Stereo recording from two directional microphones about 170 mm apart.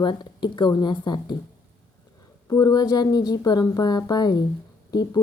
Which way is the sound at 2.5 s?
25° left (ahead or behind).